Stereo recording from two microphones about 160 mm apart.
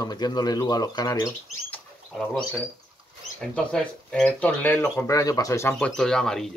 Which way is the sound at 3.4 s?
5° left (ahead or behind).